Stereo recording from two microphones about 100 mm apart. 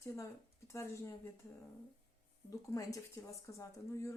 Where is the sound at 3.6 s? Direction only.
30° left (ahead or behind).